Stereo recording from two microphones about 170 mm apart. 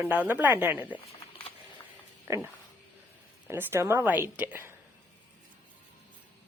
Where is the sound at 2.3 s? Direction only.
15° right (ahead or behind).